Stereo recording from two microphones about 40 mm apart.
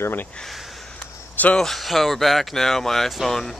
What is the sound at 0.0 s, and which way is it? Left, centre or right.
Speech, left.